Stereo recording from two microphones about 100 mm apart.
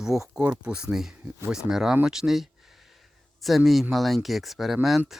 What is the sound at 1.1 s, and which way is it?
Speech, 20° right (ahead or behind).